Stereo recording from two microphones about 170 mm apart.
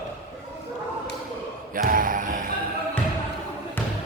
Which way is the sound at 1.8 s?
55° right (ahead or behind).